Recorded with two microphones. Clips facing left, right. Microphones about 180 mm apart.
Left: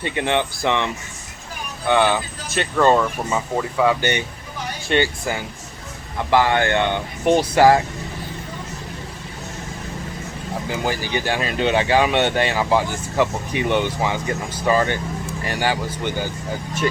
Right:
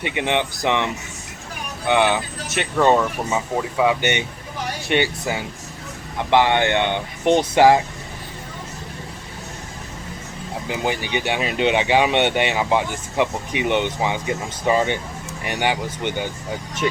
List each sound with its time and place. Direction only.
0.0 s speech: 15° right (ahead or behind)
1.9 s speech: 20° right (ahead or behind)
2.7 s speech: 5° right (ahead or behind)
11.3 s speech: 20° right (ahead or behind)